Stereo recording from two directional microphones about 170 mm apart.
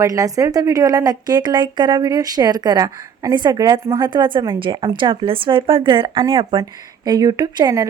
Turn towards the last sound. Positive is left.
turn(degrees=-25)  # may be behind; listen again after turning